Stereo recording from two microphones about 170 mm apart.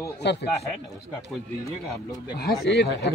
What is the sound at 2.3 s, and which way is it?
Speech, 70° left (ahead or behind).